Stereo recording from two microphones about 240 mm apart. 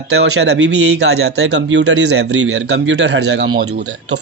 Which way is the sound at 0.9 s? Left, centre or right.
Right.